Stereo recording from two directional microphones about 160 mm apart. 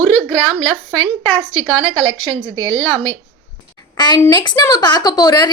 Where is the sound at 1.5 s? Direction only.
35° right (ahead or behind).